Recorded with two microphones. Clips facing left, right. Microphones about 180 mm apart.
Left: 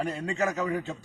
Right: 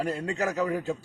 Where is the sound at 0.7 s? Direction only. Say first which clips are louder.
Right 2 dB; 5° right (ahead or behind).